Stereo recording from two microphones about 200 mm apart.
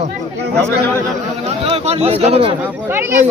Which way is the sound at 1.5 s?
30° right (ahead or behind).